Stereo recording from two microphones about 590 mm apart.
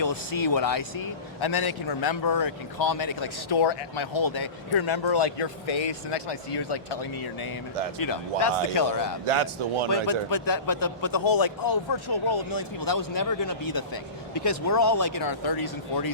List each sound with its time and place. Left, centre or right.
0.0 s a man's voice: left
7.9 s a man's voice: left
9.2 s a man's voice: right
9.9 s a man's voice: left